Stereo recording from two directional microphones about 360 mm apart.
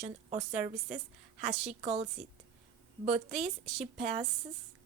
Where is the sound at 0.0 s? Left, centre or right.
Centre.